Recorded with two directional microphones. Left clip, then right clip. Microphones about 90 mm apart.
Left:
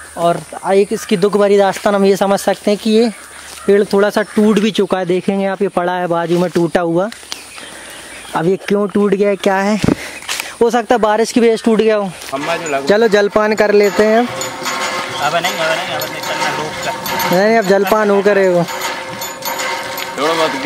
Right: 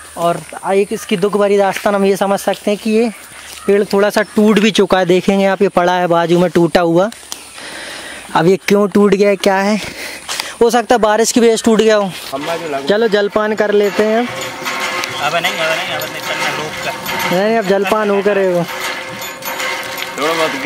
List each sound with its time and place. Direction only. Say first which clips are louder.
0.2 s speech: left 1 dB; 5° left (ahead or behind)
3.6 s speech: left 1 dB; 5° right (ahead or behind)
4.6 s speech: right 4 dB; 40° right (ahead or behind)
8.5 s speech: right 2 dB; 20° right (ahead or behind)
12.4 s speech: left 2 dB; 45° left (ahead or behind)
12.8 s speech: left 2 dB; 20° left (ahead or behind)
13.7 s speech: left 2 dB; centre (ahead or behind)
19.5 s a sound: even; centre (ahead or behind)